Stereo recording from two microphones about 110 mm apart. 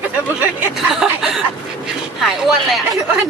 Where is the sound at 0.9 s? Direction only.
5° right (ahead or behind).